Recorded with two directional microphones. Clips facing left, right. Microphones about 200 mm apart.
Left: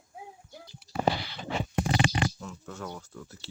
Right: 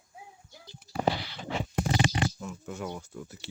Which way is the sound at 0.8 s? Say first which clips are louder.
Left 1 dB; 50° right (ahead or behind).